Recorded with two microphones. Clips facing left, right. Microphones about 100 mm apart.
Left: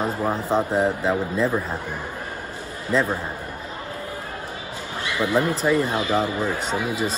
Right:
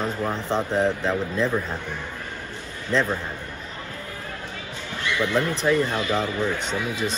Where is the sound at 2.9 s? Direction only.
5° left (ahead or behind).